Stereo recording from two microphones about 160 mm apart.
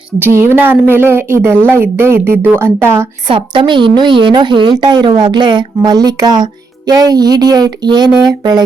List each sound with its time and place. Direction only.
0.2 s speech: 15° right (ahead or behind)
3.2 s a woman's voice: 30° right (ahead or behind)